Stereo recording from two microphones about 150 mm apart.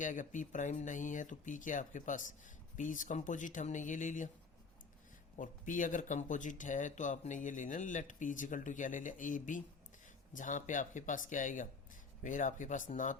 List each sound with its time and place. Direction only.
0.0 s speech: 55° left (ahead or behind)
5.4 s speech: 60° left (ahead or behind)